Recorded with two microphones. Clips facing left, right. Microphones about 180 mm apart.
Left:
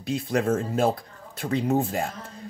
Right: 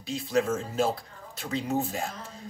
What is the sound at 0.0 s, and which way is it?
A man's voice, 55° left (ahead or behind).